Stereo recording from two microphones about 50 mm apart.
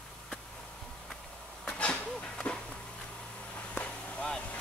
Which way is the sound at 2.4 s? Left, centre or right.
Left.